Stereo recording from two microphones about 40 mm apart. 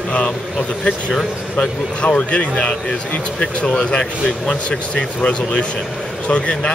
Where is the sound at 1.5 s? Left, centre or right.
Left.